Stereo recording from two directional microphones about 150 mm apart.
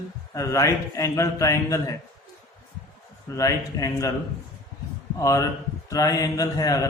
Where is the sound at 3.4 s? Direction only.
20° left (ahead or behind).